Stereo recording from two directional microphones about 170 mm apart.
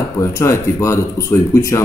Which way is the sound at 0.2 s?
20° left (ahead or behind).